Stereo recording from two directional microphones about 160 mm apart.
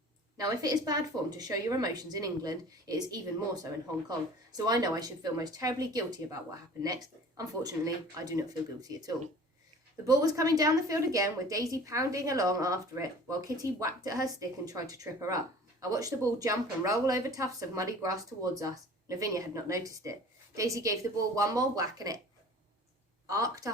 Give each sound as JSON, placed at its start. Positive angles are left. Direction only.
{"t": 0.3, "sound": "a woman's voice", "side_deg": -20}
{"t": 23.2, "sound": "a woman's voice", "side_deg": -20}